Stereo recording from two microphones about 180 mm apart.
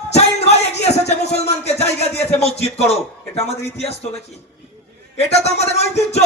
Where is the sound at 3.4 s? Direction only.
35° left (ahead or behind).